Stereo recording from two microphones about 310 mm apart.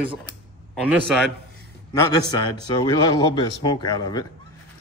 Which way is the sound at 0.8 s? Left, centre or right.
Centre.